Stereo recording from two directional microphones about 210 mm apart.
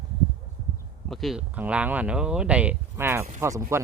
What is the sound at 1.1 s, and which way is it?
Speech, centre (ahead or behind).